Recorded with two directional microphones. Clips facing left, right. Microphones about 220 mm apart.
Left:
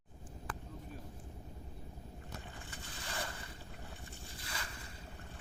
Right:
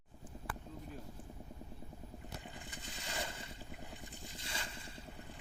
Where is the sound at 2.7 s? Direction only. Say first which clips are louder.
Even; 20° right (ahead or behind).